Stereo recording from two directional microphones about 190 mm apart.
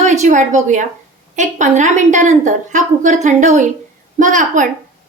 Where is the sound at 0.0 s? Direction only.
40° right (ahead or behind).